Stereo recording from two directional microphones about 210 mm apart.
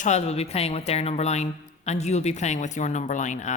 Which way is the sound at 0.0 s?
30° left (ahead or behind).